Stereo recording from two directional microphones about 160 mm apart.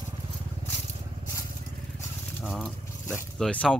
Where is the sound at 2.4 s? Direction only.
Centre (ahead or behind).